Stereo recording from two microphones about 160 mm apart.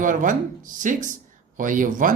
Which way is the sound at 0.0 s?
55° right (ahead or behind).